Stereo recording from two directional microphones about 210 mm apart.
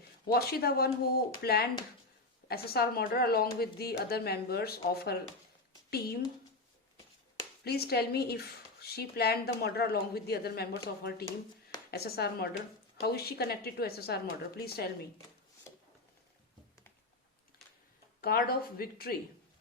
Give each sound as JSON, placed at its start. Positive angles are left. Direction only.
{"t": 0.3, "sound": "speech", "side_deg": 50}
{"t": 7.6, "sound": "speech", "side_deg": 50}
{"t": 18.2, "sound": "speech", "side_deg": 45}